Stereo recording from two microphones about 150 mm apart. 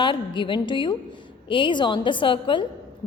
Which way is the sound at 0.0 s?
30° left (ahead or behind).